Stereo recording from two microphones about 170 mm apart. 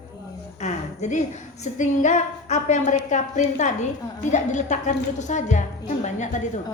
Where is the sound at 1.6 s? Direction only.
45° left (ahead or behind).